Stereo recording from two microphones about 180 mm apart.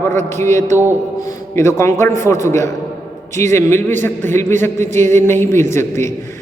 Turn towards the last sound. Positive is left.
turn(degrees=15)  # may be behind; listen again after turning